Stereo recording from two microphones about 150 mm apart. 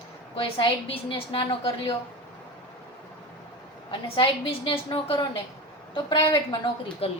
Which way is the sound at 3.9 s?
35° left (ahead or behind).